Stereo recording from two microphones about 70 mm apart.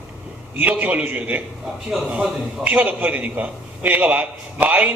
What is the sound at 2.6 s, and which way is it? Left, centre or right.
A man's voice, right.